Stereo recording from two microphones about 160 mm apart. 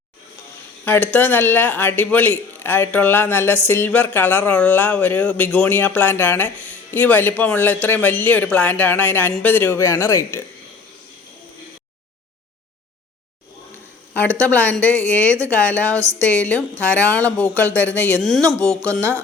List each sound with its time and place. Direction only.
0.9 s speech: 10° left (ahead or behind)
14.4 s speech: 10° left (ahead or behind)
15.9 s speech: 20° right (ahead or behind)
16.8 s speech: 10° left (ahead or behind)